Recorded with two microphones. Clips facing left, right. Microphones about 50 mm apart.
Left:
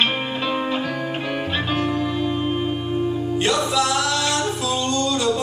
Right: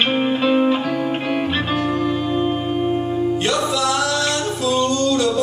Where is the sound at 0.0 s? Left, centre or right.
Centre.